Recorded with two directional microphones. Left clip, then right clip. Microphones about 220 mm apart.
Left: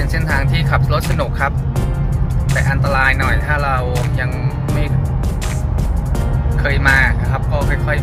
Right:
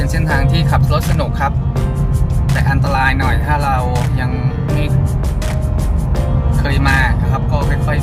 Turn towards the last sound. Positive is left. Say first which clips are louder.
# left 2 dB
turn(degrees=-15)  # may be behind; listen again after turning